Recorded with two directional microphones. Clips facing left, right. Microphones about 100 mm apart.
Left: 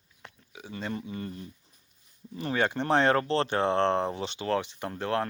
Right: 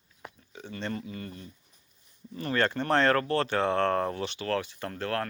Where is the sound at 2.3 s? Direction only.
15° left (ahead or behind).